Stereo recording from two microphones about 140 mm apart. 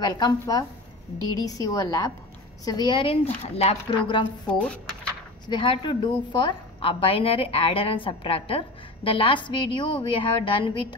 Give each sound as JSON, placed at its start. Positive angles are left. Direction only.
{"t": 0.0, "sound": "a woman's voice", "side_deg": 30}